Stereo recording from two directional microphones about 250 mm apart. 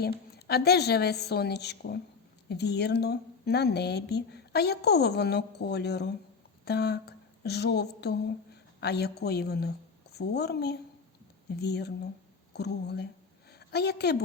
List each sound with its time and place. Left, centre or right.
0.0 s a woman's voice: left